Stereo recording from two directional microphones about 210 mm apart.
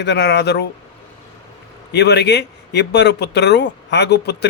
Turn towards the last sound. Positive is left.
turn(degrees=55)  # may be behind; listen again after turning